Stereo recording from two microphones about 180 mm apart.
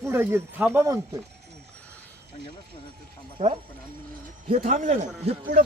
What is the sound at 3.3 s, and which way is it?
Speech, 35° right (ahead or behind).